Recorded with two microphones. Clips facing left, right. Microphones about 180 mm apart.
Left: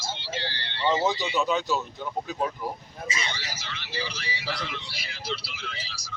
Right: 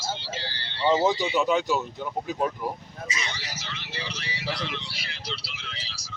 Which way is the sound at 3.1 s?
30° left (ahead or behind).